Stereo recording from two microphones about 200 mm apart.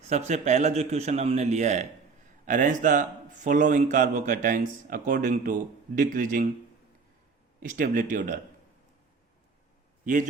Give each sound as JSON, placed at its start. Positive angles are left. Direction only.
{"t": 0.3, "sound": "speech", "side_deg": -35}
{"t": 7.6, "sound": "speech", "side_deg": -40}